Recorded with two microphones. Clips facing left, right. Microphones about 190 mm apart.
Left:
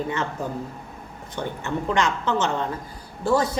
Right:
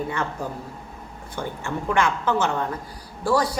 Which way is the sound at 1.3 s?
20° left (ahead or behind).